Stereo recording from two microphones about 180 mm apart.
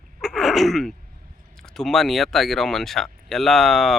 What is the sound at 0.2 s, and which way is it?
Sneeze, centre (ahead or behind).